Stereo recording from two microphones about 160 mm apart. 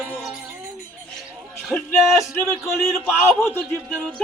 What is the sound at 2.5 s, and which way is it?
Speech, 10° left (ahead or behind).